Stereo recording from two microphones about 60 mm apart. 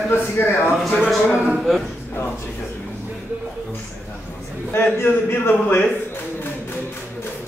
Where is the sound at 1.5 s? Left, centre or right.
Centre.